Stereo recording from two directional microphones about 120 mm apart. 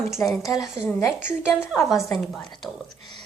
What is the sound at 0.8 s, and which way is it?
Speech, 20° left (ahead or behind).